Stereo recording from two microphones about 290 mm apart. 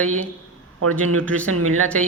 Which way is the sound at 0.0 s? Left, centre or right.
Right.